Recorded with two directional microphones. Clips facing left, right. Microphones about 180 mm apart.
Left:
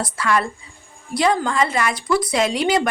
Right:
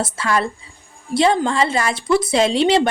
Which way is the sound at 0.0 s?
30° right (ahead or behind).